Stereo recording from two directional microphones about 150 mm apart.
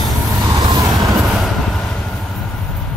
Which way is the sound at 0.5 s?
30° right (ahead or behind).